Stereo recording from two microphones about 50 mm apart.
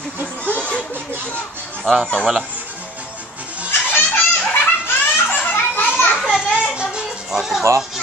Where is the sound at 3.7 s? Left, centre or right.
Left.